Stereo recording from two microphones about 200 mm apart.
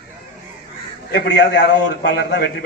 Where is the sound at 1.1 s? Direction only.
60° left (ahead or behind).